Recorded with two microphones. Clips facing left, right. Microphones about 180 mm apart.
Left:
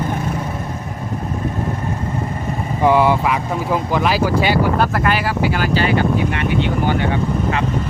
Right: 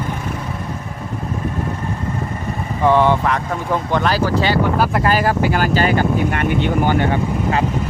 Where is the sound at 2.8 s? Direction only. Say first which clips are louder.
Even; 10° left (ahead or behind).